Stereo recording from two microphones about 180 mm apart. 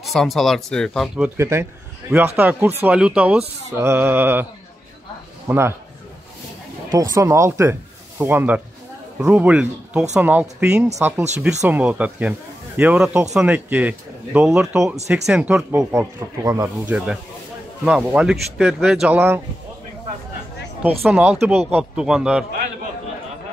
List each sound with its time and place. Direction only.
0.0 s speech: centre (ahead or behind)
1.3 s a man's voice: 15° right (ahead or behind)
5.5 s a man's voice: 15° right (ahead or behind)
6.9 s a man's voice: 20° right (ahead or behind)
16.8 s speech: 5° right (ahead or behind)
21.0 s speech: 5° right (ahead or behind)